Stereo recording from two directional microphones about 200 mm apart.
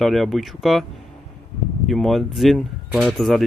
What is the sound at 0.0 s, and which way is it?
Speech, centre (ahead or behind).